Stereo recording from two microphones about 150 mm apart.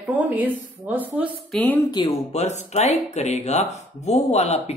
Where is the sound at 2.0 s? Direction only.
45° left (ahead or behind).